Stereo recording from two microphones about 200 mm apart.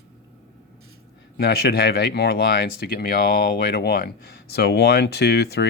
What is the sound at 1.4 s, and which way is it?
Speech, 50° left (ahead or behind).